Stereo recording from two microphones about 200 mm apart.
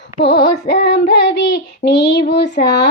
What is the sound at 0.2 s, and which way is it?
Child singing, 55° left (ahead or behind).